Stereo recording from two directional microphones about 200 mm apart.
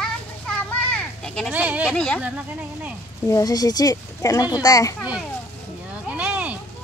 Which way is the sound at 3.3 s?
20° left (ahead or behind).